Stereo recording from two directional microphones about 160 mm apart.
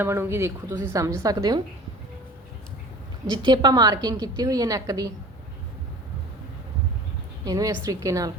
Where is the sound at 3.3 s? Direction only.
30° right (ahead or behind).